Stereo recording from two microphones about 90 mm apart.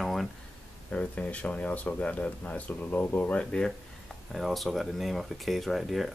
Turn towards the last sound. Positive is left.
turn(degrees=0)  # may be behind; listen again after turning